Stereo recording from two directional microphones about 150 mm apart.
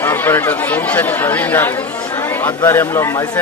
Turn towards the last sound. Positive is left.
turn(degrees=20)  # may be behind; listen again after turning